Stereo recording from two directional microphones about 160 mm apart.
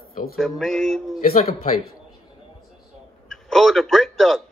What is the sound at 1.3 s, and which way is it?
Speech, 40° left (ahead or behind).